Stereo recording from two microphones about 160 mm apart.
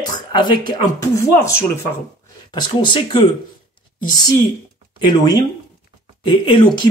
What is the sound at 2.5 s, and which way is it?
Speech, 30° left (ahead or behind).